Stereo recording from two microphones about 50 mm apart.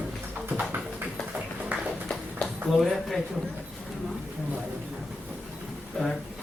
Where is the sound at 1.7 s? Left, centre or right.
Right.